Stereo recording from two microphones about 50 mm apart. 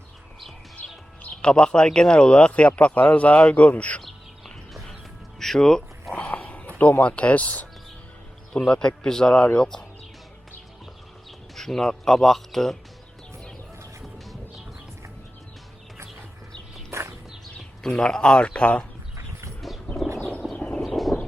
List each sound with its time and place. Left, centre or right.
1.2 s speech: left
4.0 s bird: centre
5.4 s speech: centre
6.1 s a sound: left
7.0 s speech: left
8.5 s a man's voice: centre
11.5 s speech: centre
16.9 s a sound: right
17.8 s a man's voice: centre
19.1 s livestock: right
20.6 s a sound: left
20.8 s a sound: centre